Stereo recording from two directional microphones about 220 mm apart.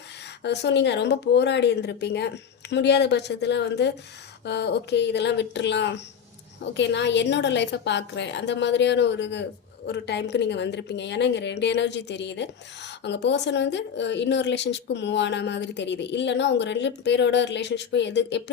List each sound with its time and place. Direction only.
0.4 s a woman's voice: 50° left (ahead or behind)